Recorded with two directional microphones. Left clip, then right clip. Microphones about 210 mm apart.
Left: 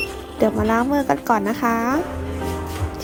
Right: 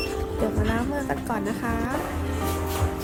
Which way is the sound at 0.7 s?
10° left (ahead or behind).